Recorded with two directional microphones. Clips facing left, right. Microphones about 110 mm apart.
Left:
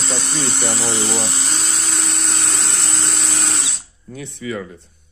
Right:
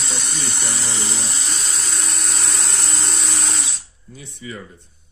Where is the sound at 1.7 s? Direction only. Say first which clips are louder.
Left 3 dB; 80° left.